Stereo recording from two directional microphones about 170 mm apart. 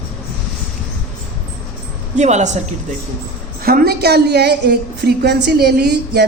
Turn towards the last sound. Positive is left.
turn(degrees=-75)  # may be behind; listen again after turning